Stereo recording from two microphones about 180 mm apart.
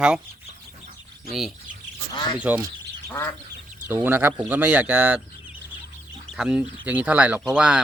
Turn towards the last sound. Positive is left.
turn(degrees=-5)  # may be behind; listen again after turning